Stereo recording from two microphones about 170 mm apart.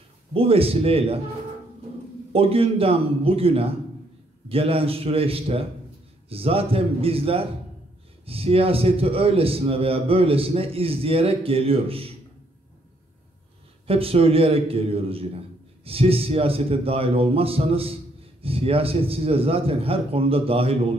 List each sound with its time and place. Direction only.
0.3 s a man's voice: 35° right (ahead or behind)
2.3 s a man's voice: 35° right (ahead or behind)
13.8 s a man's voice: 35° right (ahead or behind)